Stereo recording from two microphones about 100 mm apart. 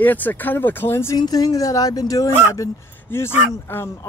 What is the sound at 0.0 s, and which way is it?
Speech, 15° left (ahead or behind).